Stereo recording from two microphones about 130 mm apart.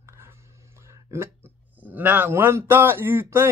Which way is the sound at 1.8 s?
15° right (ahead or behind).